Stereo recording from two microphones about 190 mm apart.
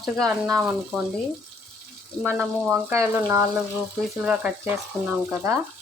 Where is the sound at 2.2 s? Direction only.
10° right (ahead or behind).